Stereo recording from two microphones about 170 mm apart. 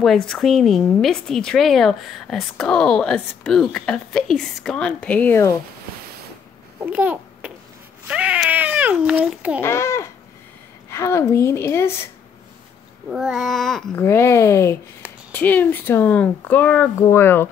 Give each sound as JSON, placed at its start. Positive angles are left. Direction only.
{"t": 0.0, "sound": "speech", "side_deg": 5}
{"t": 6.8, "sound": "babbling", "side_deg": -10}
{"t": 8.1, "sound": "speech", "side_deg": -5}
{"t": 9.6, "sound": "speech", "side_deg": 15}
{"t": 13.1, "sound": "speech", "side_deg": 0}
{"t": 14.0, "sound": "speech", "side_deg": 15}